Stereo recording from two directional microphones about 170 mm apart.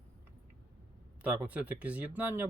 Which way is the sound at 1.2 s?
10° right (ahead or behind).